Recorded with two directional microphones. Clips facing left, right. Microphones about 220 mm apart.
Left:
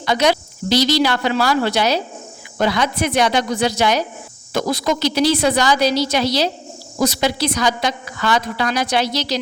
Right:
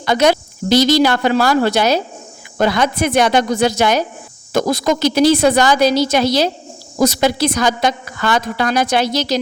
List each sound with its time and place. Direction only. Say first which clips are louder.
0.0 s a woman's voice: right 3 dB; 50° right (ahead or behind)